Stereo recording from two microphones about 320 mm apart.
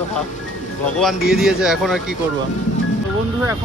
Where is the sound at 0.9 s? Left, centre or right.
Centre.